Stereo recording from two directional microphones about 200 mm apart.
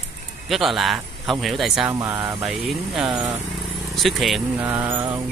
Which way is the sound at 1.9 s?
15° right (ahead or behind).